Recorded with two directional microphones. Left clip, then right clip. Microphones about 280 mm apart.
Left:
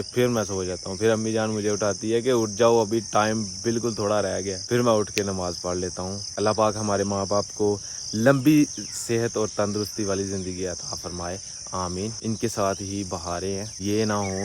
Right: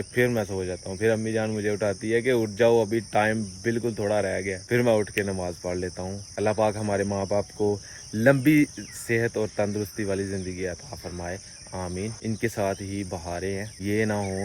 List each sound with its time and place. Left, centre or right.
0.2 s speech: centre